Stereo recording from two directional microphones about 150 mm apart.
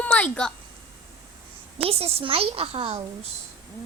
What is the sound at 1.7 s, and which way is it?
A woman's voice, 40° right (ahead or behind).